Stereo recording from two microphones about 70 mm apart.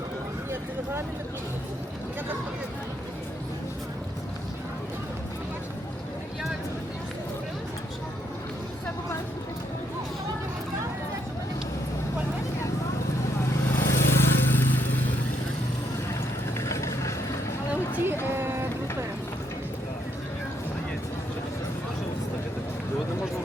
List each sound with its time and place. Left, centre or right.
13.7 s vehicle: left
16.6 s vehicle: left
18.3 s vehicle: right